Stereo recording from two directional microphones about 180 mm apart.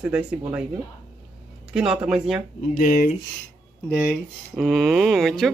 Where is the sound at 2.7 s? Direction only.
50° left (ahead or behind).